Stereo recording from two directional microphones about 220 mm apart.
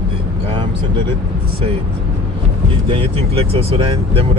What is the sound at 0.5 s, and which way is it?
Speech, 20° right (ahead or behind).